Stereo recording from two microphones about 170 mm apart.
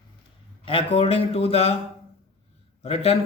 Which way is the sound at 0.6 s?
30° left (ahead or behind).